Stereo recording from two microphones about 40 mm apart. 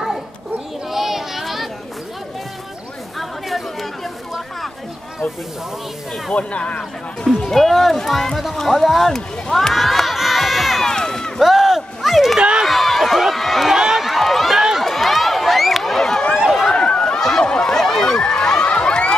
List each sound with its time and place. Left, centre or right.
0.8 s a sound: centre
3.2 s chatter: centre
6.3 s speech: left
7.5 s speech: centre
9.1 s speech: centre
9.8 s crowd: centre
10.9 s run: centre
11.3 s a sound: centre
12.4 s run: right
12.6 s run: centre
13.7 s run: centre
14.0 s run: centre
16.7 s a sound: left
18.7 s a sound: left